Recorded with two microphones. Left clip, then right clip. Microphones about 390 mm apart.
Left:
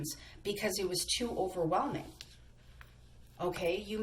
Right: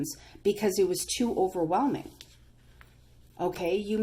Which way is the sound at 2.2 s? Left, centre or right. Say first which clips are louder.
Right 1 dB; centre.